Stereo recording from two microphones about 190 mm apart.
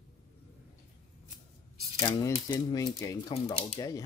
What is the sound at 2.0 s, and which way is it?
Speech, 15° left (ahead or behind).